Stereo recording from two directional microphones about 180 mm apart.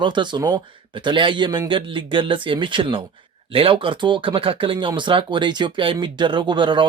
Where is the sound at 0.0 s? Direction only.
25° right (ahead or behind).